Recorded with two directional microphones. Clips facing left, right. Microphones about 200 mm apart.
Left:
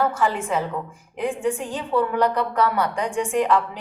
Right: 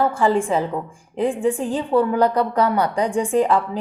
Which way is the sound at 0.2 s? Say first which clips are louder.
Right 5 dB; 30° right (ahead or behind).